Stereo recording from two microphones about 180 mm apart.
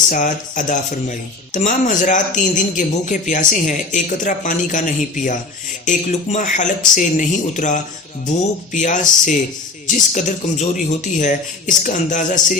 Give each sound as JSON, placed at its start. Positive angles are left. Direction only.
{"t": 0.1, "sound": "speech", "side_deg": 45}